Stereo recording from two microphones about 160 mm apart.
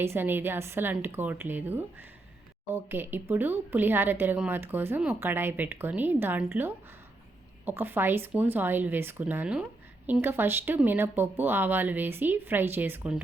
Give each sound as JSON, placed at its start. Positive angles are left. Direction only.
{"t": 0.0, "sound": "speech", "side_deg": -15}